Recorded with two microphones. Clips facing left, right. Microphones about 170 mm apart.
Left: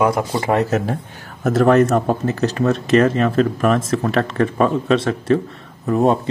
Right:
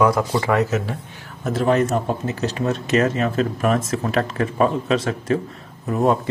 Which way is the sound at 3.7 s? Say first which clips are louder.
Left 3 dB; 35° left (ahead or behind).